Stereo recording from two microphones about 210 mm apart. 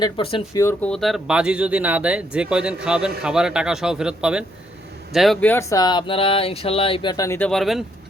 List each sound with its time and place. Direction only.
0.0 s speech: 25° left (ahead or behind); by 7.9 s centre (ahead or behind)